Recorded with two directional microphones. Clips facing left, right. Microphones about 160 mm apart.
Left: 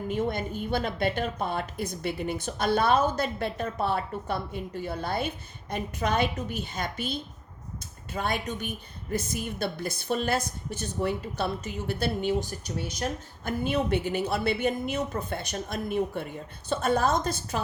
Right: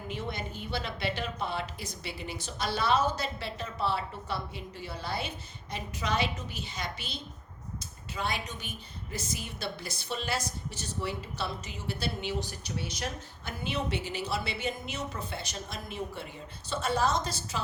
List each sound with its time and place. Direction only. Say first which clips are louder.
0.1 s a woman's voice: left 8 dB; 50° left (ahead or behind)